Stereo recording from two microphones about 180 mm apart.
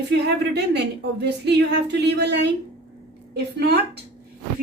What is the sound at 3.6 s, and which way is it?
Speech, 65° right (ahead or behind).